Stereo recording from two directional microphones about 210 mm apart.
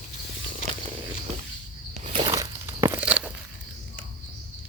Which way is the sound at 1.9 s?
25° right (ahead or behind).